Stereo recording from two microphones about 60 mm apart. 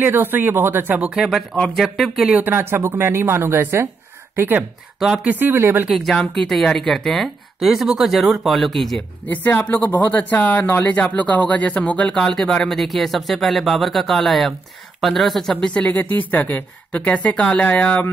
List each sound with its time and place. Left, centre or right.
0.0 s speech: right
1.0 s speech: centre
1.5 s speech: centre
2.4 s a woman's voice: right
5.9 s speech: centre
7.6 s speech: centre
9.3 s speech: left
12.2 s speech: centre
15.5 s speech: centre